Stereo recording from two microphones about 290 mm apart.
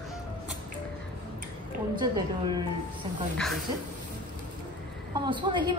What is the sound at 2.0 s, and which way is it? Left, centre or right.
Speech, centre.